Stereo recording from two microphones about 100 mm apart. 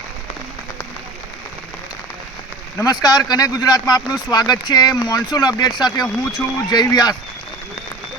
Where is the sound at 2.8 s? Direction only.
40° left (ahead or behind).